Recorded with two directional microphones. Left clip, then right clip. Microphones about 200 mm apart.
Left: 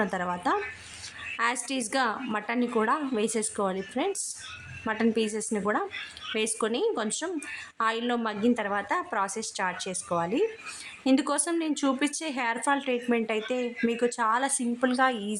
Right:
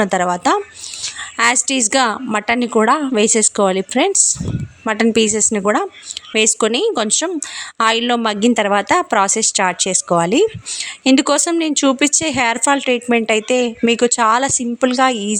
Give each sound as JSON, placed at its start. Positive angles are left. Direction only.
{"t": 0.0, "sound": "speech", "side_deg": -40}